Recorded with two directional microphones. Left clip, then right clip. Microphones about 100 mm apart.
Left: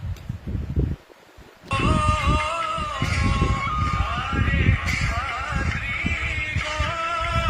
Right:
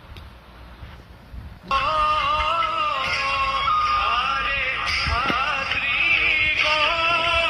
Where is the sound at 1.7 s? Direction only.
25° right (ahead or behind).